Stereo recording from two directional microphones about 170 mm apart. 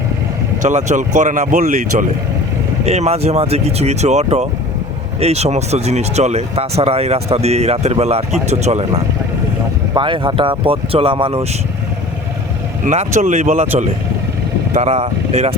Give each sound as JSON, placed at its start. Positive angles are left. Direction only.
{"t": 0.6, "sound": "speech", "side_deg": -45}
{"t": 12.8, "sound": "speech", "side_deg": -45}
{"t": 14.7, "sound": "speech", "side_deg": -40}